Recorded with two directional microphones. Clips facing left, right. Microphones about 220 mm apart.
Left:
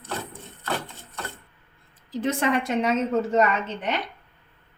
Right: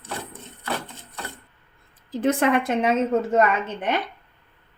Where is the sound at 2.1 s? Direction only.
55° right (ahead or behind).